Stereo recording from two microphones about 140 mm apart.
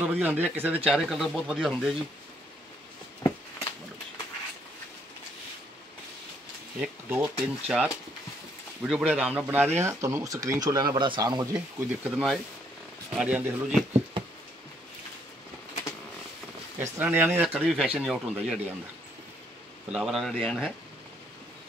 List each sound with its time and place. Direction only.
0.0 s speech: 10° right (ahead or behind)
3.3 s a sound: 25° left (ahead or behind)
6.8 s speech: 5° right (ahead or behind); by 11.4 s 30° right (ahead or behind)
11.5 s speech: 5° right (ahead or behind)
16.8 s speech: 15° right (ahead or behind)
19.9 s speech: centre (ahead or behind)